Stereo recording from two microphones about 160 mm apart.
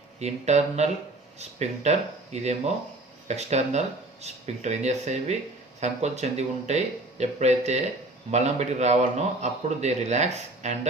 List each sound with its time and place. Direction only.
0.2 s a man's voice: 45° right (ahead or behind)